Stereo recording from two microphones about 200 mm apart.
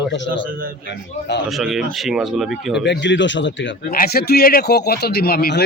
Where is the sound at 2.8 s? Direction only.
60° left (ahead or behind).